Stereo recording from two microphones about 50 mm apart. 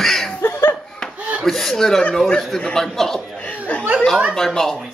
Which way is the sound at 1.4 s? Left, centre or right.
Centre.